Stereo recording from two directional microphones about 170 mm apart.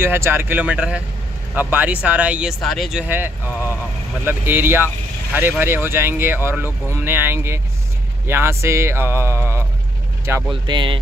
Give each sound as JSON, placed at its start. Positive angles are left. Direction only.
{"t": 0.0, "sound": "speech", "side_deg": -15}
{"t": 10.5, "sound": "speech", "side_deg": -30}